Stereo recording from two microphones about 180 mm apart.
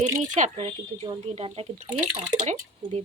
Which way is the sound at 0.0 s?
40° right (ahead or behind).